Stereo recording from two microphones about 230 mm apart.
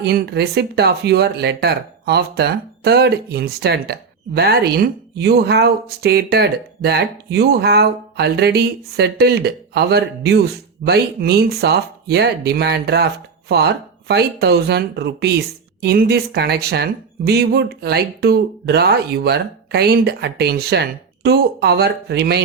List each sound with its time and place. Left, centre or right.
0.0 s speech: right